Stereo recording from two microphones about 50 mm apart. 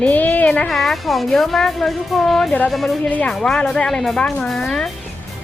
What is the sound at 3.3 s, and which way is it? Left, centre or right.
Speech, centre.